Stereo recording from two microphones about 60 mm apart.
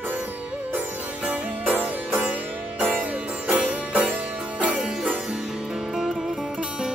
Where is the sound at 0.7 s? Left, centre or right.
Right.